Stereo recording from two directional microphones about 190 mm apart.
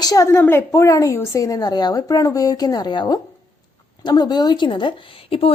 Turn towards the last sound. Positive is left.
turn(degrees=30)  # may be behind; listen again after turning